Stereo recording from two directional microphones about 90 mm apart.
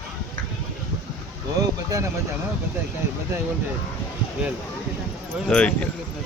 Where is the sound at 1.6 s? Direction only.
40° right (ahead or behind).